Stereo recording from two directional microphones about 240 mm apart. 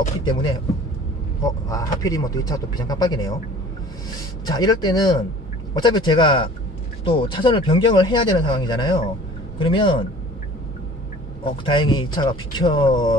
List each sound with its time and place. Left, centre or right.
0.2 s speech: centre
4.5 s speech: centre
11.4 s speech: centre